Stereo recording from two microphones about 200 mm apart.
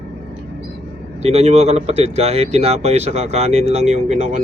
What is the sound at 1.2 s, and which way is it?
Speech, 35° right (ahead or behind).